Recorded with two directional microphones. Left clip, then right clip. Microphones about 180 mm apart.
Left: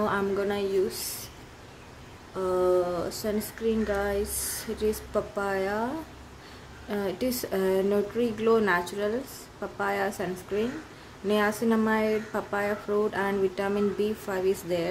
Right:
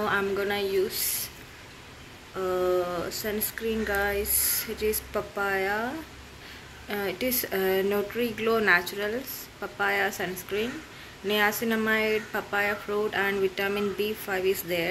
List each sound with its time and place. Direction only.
0.0 s speech: 20° left (ahead or behind)
3.1 s speech: 20° left (ahead or behind)
6.9 s speech: 20° left (ahead or behind)